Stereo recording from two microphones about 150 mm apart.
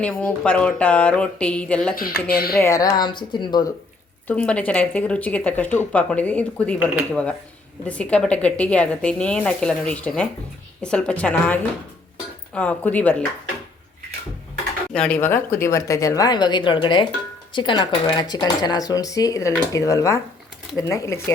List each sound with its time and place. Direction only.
0.0 s speech: 5° left (ahead or behind)
2.2 s speech: 90° left
2.6 s speech: 20° left (ahead or behind)
4.3 s speech: 10° left (ahead or behind)
14.9 s speech: 5° left (ahead or behind)